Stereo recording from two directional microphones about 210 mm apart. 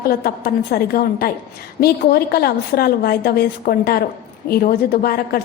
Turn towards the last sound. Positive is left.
turn(degrees=45)  # may be behind; listen again after turning